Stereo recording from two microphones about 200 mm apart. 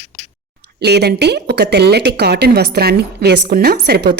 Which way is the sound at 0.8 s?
55° right (ahead or behind).